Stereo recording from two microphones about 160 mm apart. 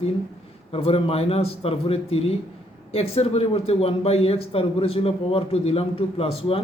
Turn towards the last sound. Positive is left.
turn(degrees=35)  # may be behind; listen again after turning